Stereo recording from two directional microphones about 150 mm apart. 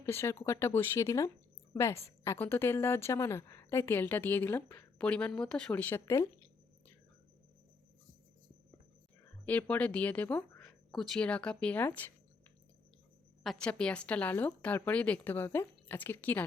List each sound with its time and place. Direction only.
0.0 s a woman's voice: 15° left (ahead or behind)
9.5 s a woman's voice: 10° left (ahead or behind)
13.4 s a woman's voice: 5° left (ahead or behind)